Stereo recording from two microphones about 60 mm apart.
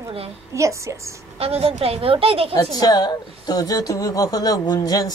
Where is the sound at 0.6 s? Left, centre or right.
Right.